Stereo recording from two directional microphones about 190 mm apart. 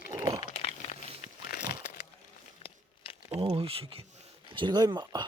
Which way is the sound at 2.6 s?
30° left (ahead or behind).